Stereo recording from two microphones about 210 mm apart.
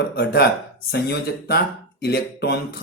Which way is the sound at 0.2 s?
50° left (ahead or behind).